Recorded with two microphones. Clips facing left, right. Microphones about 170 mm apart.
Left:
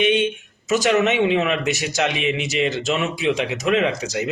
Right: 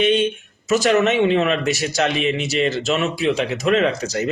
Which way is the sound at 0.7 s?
15° left (ahead or behind).